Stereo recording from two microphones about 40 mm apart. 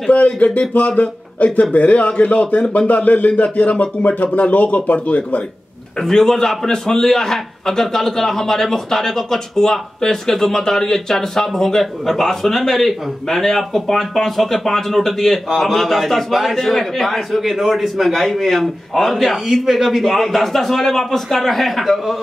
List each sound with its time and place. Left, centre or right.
0.1 s speech: left
6.0 s a man's voice: centre
17.4 s a man's voice: centre